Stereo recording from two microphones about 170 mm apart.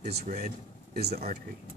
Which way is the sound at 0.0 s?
65° right (ahead or behind).